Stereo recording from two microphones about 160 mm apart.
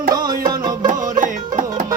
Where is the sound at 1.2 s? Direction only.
55° right (ahead or behind).